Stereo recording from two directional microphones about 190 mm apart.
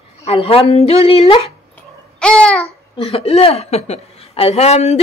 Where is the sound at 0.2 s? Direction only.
35° left (ahead or behind).